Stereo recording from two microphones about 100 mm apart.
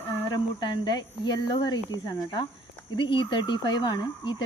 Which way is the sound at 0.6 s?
45° left (ahead or behind).